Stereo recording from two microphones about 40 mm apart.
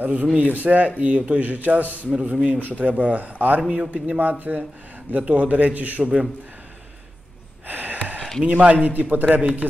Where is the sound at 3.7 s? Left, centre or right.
Right.